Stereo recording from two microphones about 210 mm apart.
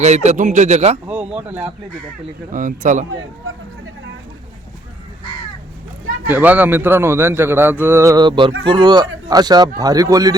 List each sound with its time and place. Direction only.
0.0 s speech: 35° right (ahead or behind)
1.0 s speech: 5° right (ahead or behind)
2.5 s speech: 40° right (ahead or behind)
6.2 s a man's voice: 10° right (ahead or behind)